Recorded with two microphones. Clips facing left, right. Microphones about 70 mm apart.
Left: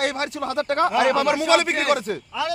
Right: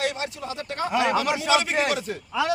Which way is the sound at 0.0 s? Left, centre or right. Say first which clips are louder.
Left 4 dB; left.